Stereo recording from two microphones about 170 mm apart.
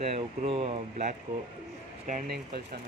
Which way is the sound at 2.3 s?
65° right (ahead or behind).